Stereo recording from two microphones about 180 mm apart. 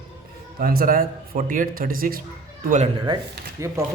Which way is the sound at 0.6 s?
55° right (ahead or behind).